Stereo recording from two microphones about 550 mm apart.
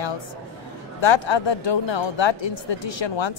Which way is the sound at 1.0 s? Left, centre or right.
Left.